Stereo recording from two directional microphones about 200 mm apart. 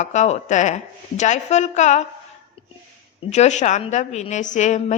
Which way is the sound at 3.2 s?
35° left (ahead or behind).